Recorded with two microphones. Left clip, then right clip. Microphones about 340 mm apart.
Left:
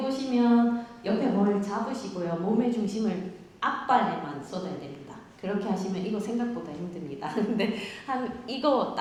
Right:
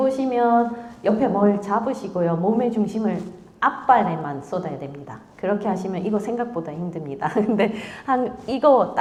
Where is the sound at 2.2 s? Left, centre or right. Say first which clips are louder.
Right 12 dB; right.